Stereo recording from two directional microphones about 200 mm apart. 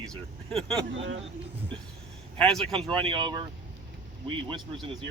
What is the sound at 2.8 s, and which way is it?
Speech, 25° right (ahead or behind).